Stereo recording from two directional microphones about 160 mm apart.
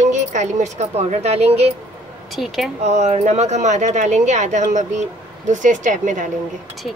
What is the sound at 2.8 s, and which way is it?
Speech, 45° right (ahead or behind).